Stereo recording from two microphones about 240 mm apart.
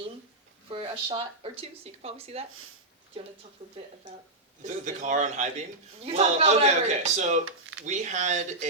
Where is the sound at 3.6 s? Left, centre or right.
Right.